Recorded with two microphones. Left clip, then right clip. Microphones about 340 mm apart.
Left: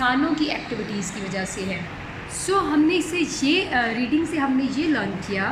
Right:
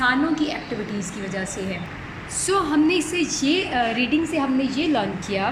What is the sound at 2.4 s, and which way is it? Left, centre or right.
A woman's voice, centre.